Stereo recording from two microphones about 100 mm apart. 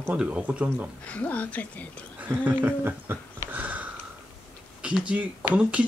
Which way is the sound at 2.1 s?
20° right (ahead or behind).